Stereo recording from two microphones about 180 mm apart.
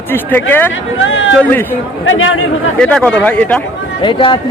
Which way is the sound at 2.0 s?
90° left.